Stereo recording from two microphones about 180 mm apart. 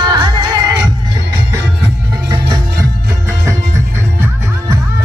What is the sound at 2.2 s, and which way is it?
Music, 20° right (ahead or behind).